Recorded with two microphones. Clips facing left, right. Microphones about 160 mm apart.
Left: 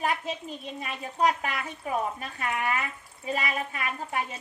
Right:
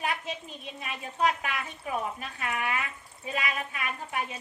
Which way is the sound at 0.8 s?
35° left (ahead or behind).